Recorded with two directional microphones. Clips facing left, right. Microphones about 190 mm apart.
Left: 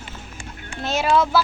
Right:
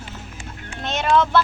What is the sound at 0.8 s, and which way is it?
Speech, 5° left (ahead or behind).